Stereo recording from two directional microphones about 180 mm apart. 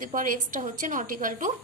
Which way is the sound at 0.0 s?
50° right (ahead or behind).